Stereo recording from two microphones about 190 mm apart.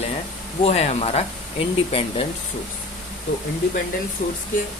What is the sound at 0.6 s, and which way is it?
Speech, 35° left (ahead or behind).